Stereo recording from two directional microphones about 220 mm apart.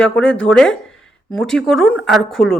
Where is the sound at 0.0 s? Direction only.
5° left (ahead or behind).